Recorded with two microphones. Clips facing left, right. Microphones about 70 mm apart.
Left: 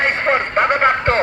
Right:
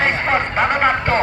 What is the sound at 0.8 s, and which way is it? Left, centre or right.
Speech, left.